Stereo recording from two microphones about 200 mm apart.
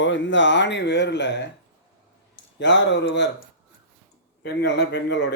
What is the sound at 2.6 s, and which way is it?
Speech, 65° left (ahead or behind).